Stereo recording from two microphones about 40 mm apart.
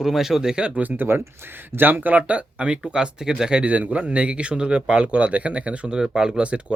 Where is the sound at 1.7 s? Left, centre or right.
Right.